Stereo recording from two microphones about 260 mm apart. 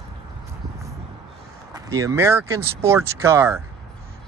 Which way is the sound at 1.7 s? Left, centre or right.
Centre.